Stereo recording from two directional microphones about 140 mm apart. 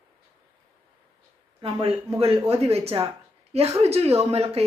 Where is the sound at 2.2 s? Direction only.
45° right (ahead or behind).